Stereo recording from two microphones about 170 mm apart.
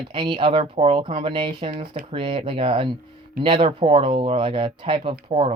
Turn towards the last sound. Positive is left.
turn(degrees=-35)  # may be behind; listen again after turning